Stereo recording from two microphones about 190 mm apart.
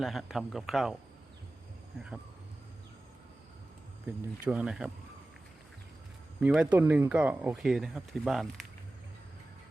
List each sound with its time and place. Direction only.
0.0 s speech: centre (ahead or behind)
4.0 s speech: 5° right (ahead or behind)
6.4 s speech: 5° right (ahead or behind)